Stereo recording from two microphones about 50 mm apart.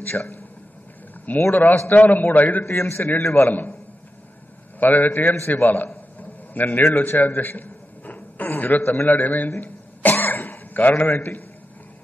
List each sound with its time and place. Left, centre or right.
0.0 s a man's voice: left
1.5 s a man's voice: left
2.6 s a man's voice: left
4.7 s a man's voice: left
9.6 s cough: left